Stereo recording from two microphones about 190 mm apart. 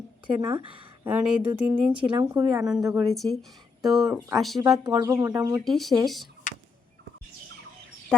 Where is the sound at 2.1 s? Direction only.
20° right (ahead or behind).